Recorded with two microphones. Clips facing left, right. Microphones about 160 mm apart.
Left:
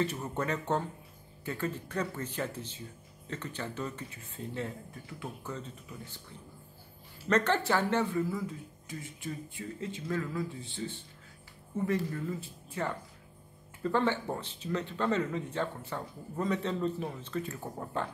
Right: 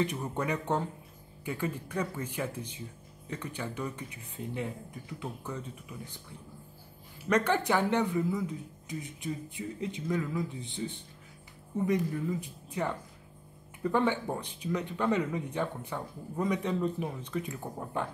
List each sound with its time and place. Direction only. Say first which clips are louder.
0.0 s speech: right 1 dB; 15° right (ahead or behind)
7.2 s speech: right 1 dB; 10° right (ahead or behind)